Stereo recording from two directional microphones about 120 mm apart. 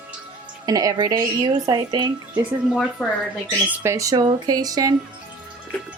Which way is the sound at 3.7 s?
20° right (ahead or behind).